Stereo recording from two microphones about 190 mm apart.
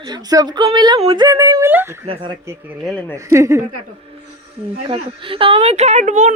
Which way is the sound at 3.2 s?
15° right (ahead or behind).